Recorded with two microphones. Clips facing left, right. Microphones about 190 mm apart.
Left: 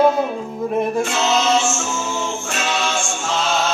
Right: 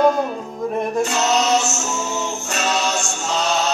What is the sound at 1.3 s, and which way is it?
Music, 40° right (ahead or behind).